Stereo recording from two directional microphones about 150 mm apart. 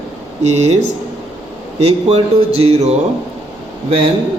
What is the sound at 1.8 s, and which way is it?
Speech, 45° right (ahead or behind).